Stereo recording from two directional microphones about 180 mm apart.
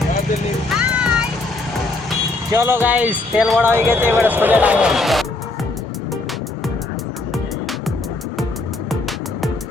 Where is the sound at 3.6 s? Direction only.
15° right (ahead or behind).